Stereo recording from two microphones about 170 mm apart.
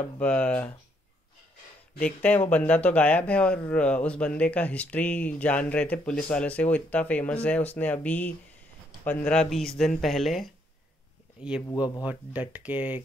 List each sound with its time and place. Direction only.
0.2 s speech: 5° left (ahead or behind)
2.0 s speech: 10° left (ahead or behind)
11.6 s speech: 20° left (ahead or behind)
12.0 s speech: 10° right (ahead or behind)